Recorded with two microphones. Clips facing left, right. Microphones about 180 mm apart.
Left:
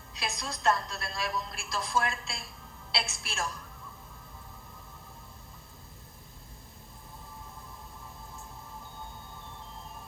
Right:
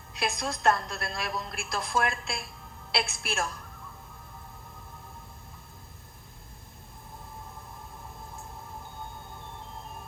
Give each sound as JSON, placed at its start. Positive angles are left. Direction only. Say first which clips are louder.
{"t": 0.1, "sound": "a woman's voice", "louder": "right 6 dB", "side_deg": -55}